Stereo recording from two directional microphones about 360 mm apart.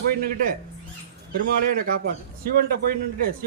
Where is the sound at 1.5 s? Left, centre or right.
Right.